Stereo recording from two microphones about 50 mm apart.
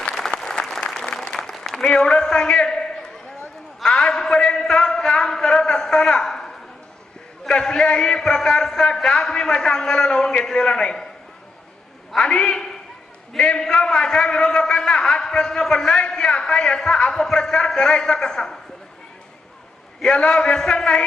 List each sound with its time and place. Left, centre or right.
0.1 s applause: centre
1.5 s applause: centre
1.8 s a man's voice: centre
3.8 s a sound: centre
7.4 s a man's voice: centre
12.1 s a man's voice: centre
20.0 s a man's voice: centre